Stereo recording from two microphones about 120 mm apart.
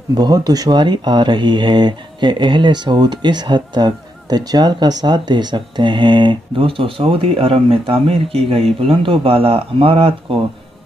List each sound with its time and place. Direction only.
0.1 s speech: 35° right (ahead or behind); by 10.1 s 55° right (ahead or behind)